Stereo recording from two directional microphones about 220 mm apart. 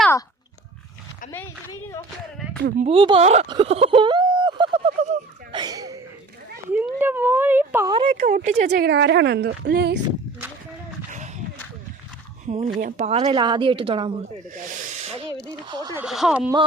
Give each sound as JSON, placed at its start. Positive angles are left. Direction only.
{"t": 1.3, "sound": "a sound", "side_deg": 10}
{"t": 2.6, "sound": "speech", "side_deg": -35}
{"t": 2.9, "sound": "a sound", "side_deg": -20}
{"t": 5.5, "sound": "a sound", "side_deg": -15}
{"t": 6.7, "sound": "speech", "side_deg": -10}
{"t": 8.7, "sound": "speech", "side_deg": -50}
{"t": 12.5, "sound": "a woman's voice", "side_deg": -30}
{"t": 14.7, "sound": "snake", "side_deg": -35}
{"t": 15.4, "sound": "speech", "side_deg": -20}
{"t": 16.0, "sound": "speech", "side_deg": 0}